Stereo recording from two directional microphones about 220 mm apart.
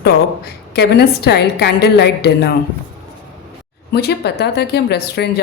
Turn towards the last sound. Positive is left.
turn(degrees=45)  # may be behind; listen again after turning